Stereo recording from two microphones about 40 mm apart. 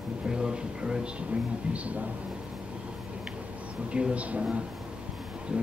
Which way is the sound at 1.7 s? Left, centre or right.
Right.